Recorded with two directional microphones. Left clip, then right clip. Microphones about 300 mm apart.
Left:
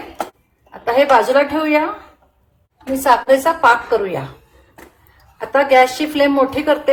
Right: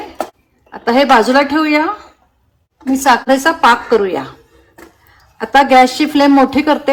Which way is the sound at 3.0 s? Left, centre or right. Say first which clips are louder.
Right 1 dB; right.